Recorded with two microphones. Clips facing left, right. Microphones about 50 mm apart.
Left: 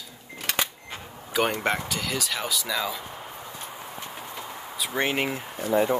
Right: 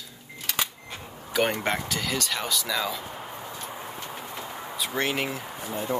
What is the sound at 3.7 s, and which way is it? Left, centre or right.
Pigeon, centre.